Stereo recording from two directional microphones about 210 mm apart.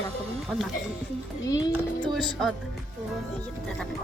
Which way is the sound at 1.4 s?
15° left (ahead or behind).